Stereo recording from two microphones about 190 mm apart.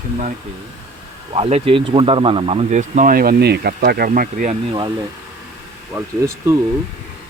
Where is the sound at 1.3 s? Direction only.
30° right (ahead or behind).